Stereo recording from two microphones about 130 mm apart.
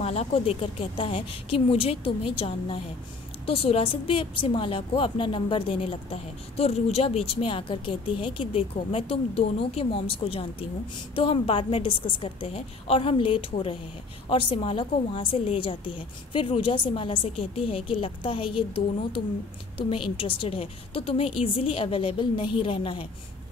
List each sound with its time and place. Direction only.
0.0 s a woman's voice: 50° left (ahead or behind)
19.9 s a woman's voice: 45° left (ahead or behind)